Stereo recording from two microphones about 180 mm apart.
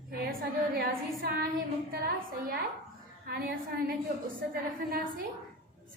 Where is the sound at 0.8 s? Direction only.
55° right (ahead or behind).